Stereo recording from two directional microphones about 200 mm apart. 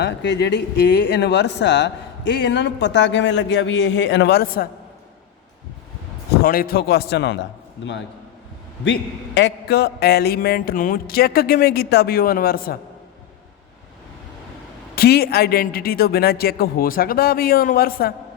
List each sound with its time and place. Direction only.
0.0 s speech: 60° left (ahead or behind)
6.4 s music: 45° left (ahead or behind)
9.4 s music: 50° left (ahead or behind)
14.9 s music: 50° left (ahead or behind)